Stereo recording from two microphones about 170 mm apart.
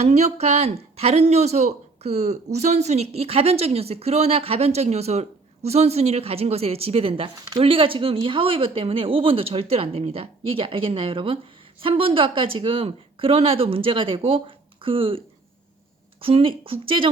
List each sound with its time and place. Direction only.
0.0 s a woman's voice: 40° right (ahead or behind)
16.2 s a woman's voice: 30° right (ahead or behind)